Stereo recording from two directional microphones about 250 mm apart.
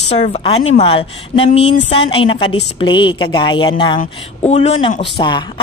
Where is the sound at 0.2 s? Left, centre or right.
Left.